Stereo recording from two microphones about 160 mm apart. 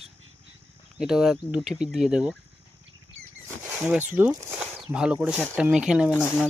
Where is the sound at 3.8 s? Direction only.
10° right (ahead or behind).